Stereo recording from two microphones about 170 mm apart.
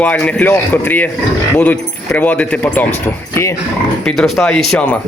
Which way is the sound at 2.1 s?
10° left (ahead or behind).